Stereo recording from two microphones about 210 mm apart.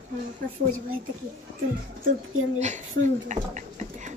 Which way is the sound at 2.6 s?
35° right (ahead or behind).